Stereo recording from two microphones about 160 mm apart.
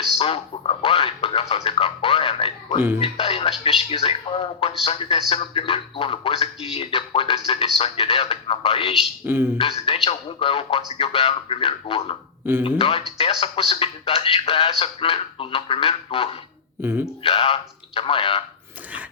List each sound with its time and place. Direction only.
0.2 s a sound: 35° left (ahead or behind)
3.0 s music: 35° left (ahead or behind)
3.6 s speech: 35° left (ahead or behind)
9.2 s speech: 15° right (ahead or behind)
9.6 s speech: 35° left (ahead or behind)
16.8 s speech: 15° right (ahead or behind)
17.2 s speech: 35° left (ahead or behind)